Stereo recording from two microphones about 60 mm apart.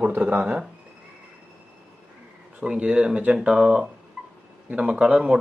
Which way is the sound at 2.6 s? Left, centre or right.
Centre.